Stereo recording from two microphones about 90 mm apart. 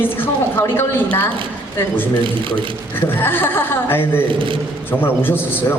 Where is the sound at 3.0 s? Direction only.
25° left (ahead or behind).